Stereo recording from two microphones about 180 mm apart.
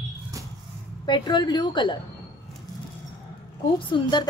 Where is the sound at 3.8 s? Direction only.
25° left (ahead or behind).